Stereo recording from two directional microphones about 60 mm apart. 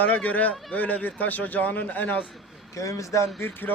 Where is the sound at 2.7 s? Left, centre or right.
Left.